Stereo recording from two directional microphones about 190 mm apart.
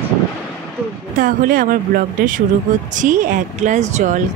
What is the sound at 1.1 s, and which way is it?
Speech, 45° right (ahead or behind).